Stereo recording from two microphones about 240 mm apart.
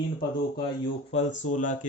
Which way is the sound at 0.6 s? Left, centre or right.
Left.